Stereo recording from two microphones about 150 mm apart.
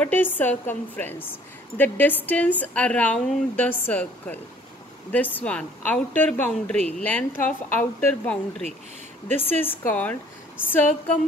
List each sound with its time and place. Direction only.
0.0 s a woman's voice: 10° left (ahead or behind)